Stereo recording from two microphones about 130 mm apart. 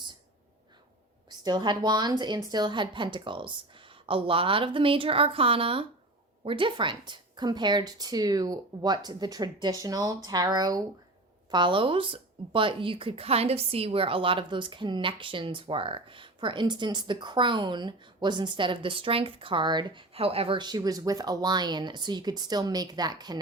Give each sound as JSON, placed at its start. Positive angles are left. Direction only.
{"t": 1.3, "sound": "speech", "side_deg": -35}
{"t": 20.6, "sound": "speech", "side_deg": -30}